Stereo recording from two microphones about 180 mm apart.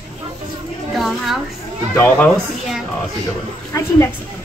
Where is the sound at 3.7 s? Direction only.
15° left (ahead or behind).